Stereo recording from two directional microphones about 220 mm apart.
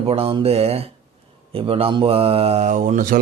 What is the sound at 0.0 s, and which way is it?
Speech, 25° right (ahead or behind).